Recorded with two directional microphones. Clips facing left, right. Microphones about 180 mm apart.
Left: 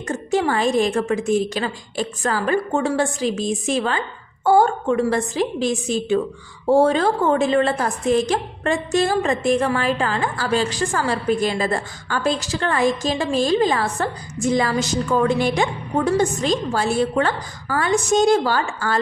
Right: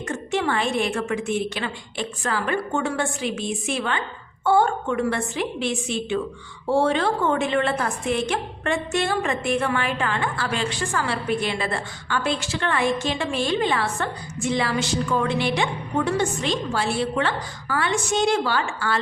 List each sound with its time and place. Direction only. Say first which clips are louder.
0.1 s a woman's voice: left 4 dB; 35° left (ahead or behind)